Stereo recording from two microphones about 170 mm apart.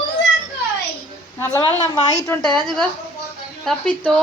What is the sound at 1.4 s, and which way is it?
Speech, 20° left (ahead or behind).